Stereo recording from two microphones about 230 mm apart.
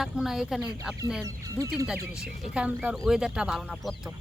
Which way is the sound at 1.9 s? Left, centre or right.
Centre.